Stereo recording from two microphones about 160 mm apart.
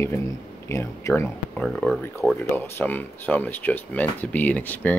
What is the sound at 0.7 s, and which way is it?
Speech, 15° left (ahead or behind).